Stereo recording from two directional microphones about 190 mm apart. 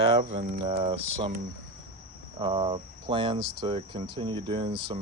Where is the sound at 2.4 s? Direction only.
25° right (ahead or behind).